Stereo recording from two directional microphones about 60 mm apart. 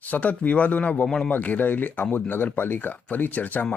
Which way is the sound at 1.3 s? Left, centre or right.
Left.